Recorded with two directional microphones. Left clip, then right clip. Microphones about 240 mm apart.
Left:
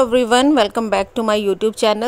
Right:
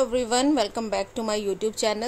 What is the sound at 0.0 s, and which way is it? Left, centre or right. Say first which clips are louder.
Speech: left 9 dB; left.